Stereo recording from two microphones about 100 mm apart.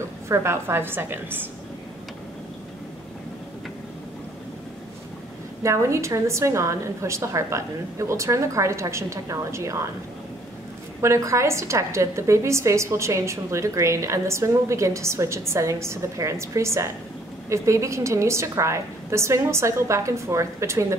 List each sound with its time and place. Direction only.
0.3 s a woman's voice: 25° right (ahead or behind)
5.6 s a woman's voice: 30° right (ahead or behind)
11.0 s a woman's voice: 30° right (ahead or behind)